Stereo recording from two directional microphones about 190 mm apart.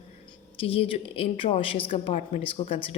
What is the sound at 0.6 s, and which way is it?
A woman's voice, 30° left (ahead or behind).